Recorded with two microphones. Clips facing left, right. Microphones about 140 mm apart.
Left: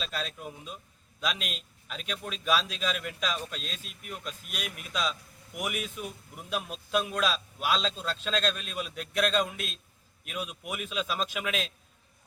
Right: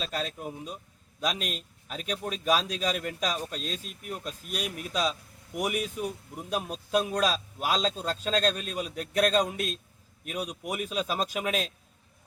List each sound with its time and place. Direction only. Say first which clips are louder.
0.0 s a man's voice: right 3 dB; 40° right (ahead or behind)